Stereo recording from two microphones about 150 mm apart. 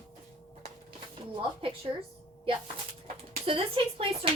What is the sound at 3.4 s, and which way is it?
Speech, 40° right (ahead or behind).